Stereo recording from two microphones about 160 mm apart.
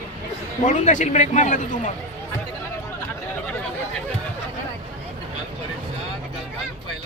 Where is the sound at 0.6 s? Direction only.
50° left (ahead or behind).